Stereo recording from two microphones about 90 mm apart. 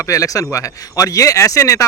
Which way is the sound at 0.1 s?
40° left (ahead or behind).